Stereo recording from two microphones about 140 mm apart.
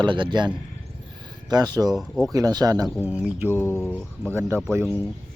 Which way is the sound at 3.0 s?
10° right (ahead or behind).